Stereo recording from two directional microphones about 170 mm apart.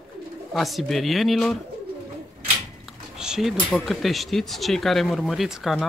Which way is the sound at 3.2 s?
5° right (ahead or behind).